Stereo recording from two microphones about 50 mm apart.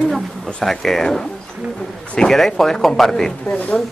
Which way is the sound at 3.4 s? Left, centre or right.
Left.